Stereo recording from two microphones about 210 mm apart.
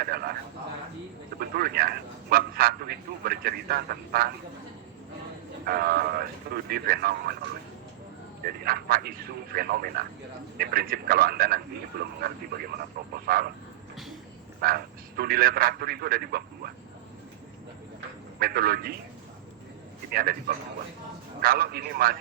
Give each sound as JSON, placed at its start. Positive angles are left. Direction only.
{"t": 0.0, "sound": "a man's voice", "side_deg": -45}
{"t": 1.4, "sound": "a man's voice", "side_deg": -45}
{"t": 5.6, "sound": "a man's voice", "side_deg": -45}
{"t": 8.4, "sound": "a man's voice", "side_deg": -45}
{"t": 13.2, "sound": "a man's voice", "side_deg": -45}
{"t": 14.6, "sound": "a man's voice", "side_deg": -45}
{"t": 18.3, "sound": "a man's voice", "side_deg": -45}
{"t": 20.1, "sound": "a man's voice", "side_deg": -45}
{"t": 21.4, "sound": "a man's voice", "side_deg": -45}